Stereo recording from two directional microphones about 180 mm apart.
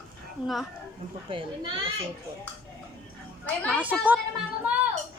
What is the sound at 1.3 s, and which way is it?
Speech, 30° right (ahead or behind).